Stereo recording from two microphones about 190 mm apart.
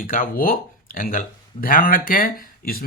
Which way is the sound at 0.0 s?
45° left (ahead or behind).